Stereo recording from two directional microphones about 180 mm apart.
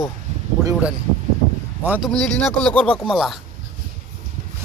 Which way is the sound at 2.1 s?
5° left (ahead or behind).